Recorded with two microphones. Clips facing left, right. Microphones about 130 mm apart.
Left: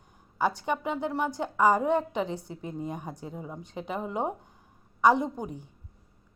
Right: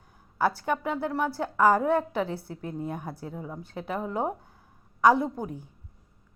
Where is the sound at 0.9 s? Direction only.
5° right (ahead or behind).